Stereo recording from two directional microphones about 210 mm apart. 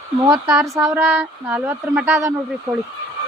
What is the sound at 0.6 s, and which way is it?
Speech, 15° right (ahead or behind).